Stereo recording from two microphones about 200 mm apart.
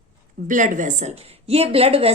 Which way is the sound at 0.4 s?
40° right (ahead or behind).